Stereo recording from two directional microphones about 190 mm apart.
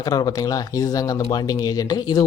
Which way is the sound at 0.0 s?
20° left (ahead or behind).